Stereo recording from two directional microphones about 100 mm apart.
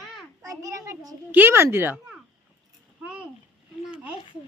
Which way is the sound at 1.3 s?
20° right (ahead or behind).